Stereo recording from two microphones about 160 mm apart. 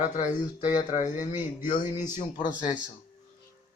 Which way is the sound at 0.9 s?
50° left (ahead or behind).